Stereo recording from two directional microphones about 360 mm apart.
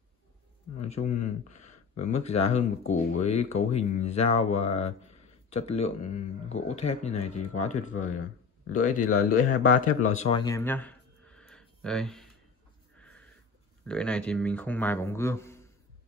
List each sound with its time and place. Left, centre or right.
0.7 s speech: centre
9.3 s speech: left
10.0 s a sound: centre
12.9 s sniff: centre
13.8 s speech: centre